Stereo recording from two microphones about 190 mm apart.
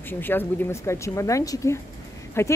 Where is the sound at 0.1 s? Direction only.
10° left (ahead or behind).